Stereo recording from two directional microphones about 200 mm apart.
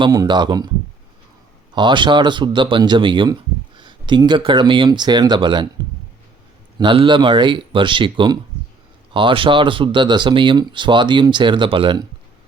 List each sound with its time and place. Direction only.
0.0 s speech: 20° right (ahead or behind)
1.7 s speech: 25° right (ahead or behind)
6.7 s speech: 25° right (ahead or behind)